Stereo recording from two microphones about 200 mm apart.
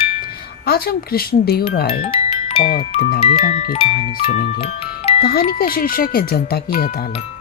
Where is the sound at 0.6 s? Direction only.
50° left (ahead or behind).